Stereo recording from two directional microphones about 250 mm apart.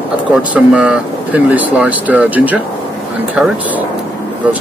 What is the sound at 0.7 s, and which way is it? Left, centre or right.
Speech, centre.